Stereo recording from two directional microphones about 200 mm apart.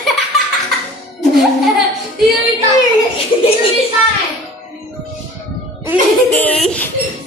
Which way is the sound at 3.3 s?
25° left (ahead or behind).